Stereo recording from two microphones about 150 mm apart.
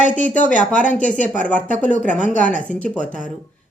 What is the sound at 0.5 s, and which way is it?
Speech, 55° left (ahead or behind).